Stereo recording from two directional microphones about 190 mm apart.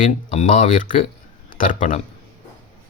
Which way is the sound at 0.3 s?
40° left (ahead or behind).